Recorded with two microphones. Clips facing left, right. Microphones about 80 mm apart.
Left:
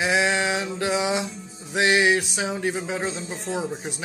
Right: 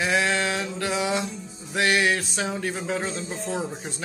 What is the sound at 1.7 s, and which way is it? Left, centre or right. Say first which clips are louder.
Speech: left 3 dB; centre.